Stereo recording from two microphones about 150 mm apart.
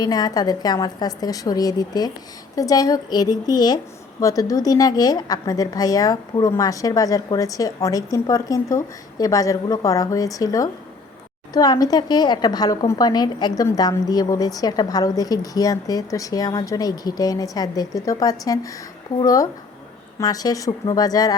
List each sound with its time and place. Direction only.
0.0 s a woman's voice: 25° left (ahead or behind)